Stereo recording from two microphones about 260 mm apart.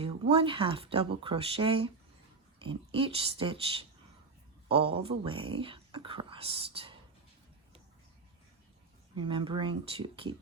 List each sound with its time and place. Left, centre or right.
0.0 s speech: right
9.2 s speech: centre